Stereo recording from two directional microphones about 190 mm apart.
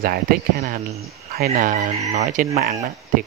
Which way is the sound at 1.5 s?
40° right (ahead or behind).